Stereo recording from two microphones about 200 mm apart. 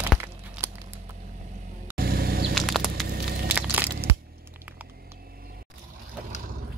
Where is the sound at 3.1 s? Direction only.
55° right (ahead or behind).